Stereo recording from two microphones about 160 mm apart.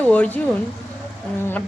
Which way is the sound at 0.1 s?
10° left (ahead or behind).